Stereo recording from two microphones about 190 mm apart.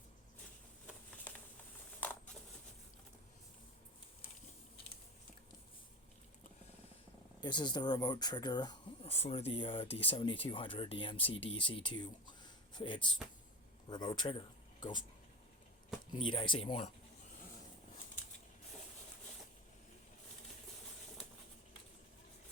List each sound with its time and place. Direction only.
7.4 s speech: 25° left (ahead or behind)
9.1 s speech: 35° left (ahead or behind)
16.1 s speech: 25° left (ahead or behind)